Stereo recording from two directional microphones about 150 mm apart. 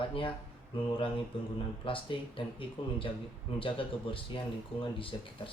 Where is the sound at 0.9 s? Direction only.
35° left (ahead or behind).